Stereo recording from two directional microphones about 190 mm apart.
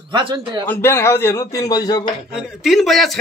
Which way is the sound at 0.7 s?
10° left (ahead or behind).